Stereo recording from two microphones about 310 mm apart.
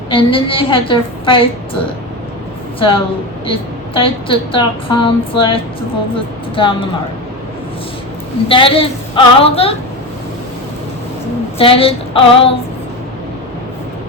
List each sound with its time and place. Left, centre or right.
0.1 s a woman's voice: centre
3.4 s a woman's voice: centre
8.4 s a woman's voice: centre
11.5 s a woman's voice: centre